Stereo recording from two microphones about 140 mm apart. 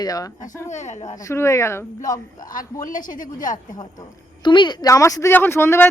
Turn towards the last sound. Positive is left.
turn(degrees=15)  # may be behind; listen again after turning